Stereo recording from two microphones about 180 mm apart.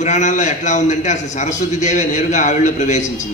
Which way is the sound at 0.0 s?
40° left (ahead or behind).